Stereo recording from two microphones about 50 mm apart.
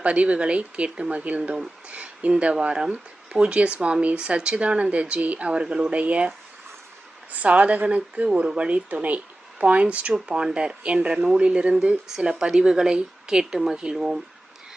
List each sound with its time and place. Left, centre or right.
0.0 s speech: right
7.3 s speech: right; by 14.2 s centre